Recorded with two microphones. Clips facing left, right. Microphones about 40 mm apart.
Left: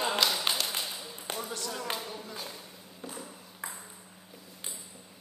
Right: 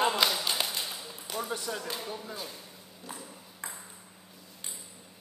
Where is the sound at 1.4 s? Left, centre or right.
Centre.